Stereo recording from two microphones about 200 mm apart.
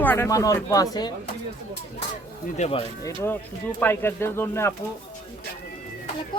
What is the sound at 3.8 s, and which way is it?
Speech, 10° left (ahead or behind).